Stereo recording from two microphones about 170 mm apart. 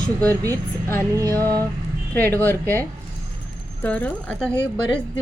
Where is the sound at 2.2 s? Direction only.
10° left (ahead or behind).